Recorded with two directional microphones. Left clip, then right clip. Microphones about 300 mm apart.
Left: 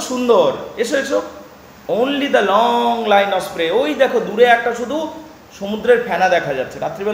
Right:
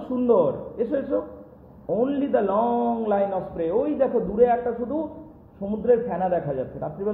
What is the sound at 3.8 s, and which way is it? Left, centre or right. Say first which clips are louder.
Speech: left 7 dB; centre.